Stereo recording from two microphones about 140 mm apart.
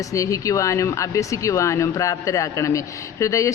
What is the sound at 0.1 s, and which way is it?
Speech, 25° left (ahead or behind).